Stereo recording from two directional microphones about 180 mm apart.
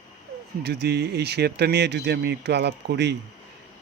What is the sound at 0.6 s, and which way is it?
Speech, 65° right (ahead or behind).